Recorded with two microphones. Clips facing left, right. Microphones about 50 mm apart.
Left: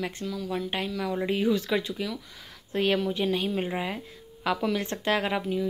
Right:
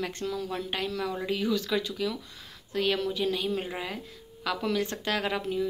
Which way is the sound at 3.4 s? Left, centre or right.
Centre.